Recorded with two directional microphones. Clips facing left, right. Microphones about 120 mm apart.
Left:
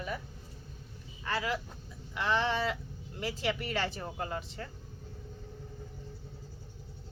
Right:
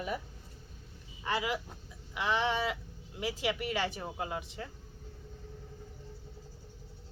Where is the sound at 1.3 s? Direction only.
15° right (ahead or behind).